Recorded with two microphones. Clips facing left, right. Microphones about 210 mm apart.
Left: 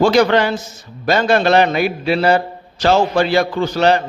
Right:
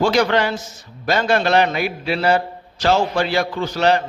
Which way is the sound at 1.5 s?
30° left (ahead or behind).